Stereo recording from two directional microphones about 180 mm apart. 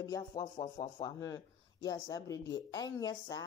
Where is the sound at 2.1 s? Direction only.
20° left (ahead or behind).